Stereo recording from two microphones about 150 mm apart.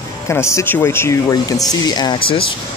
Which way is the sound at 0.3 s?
20° left (ahead or behind).